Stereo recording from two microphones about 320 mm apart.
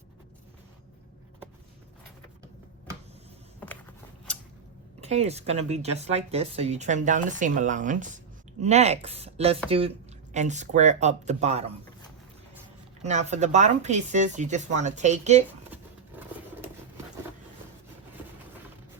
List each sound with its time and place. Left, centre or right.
5.0 s speech: centre
13.0 s speech: right